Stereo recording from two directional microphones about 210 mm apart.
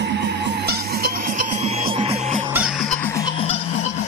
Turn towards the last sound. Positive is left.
turn(degrees=25)  # may be behind; listen again after turning